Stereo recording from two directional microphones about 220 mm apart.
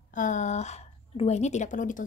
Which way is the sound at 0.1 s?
35° left (ahead or behind).